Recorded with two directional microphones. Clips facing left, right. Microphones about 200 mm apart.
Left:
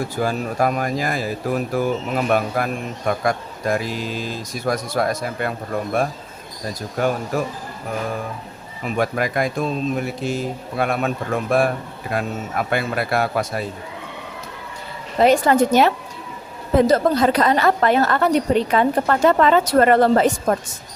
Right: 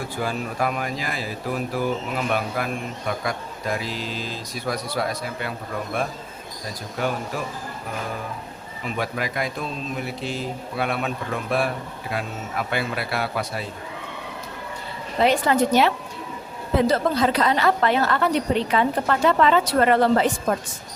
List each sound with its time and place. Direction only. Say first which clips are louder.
0.2 s a woman's voice: left 5 dB; 45° left (ahead or behind)
9.0 s a woman's voice: left 6 dB; 50° left (ahead or behind)
15.2 s a woman's voice: left 4 dB; 45° left (ahead or behind)